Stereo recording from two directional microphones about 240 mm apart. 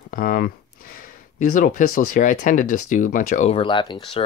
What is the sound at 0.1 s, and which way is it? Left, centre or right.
Speech, left.